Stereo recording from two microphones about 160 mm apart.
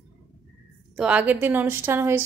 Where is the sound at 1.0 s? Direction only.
10° right (ahead or behind).